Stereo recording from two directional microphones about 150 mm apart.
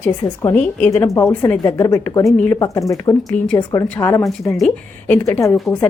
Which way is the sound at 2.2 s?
5° left (ahead or behind).